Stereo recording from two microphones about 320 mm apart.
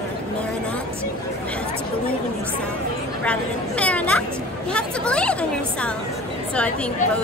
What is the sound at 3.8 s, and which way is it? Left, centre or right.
A woman's voice, centre.